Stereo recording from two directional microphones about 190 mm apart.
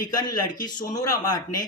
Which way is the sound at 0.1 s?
20° left (ahead or behind).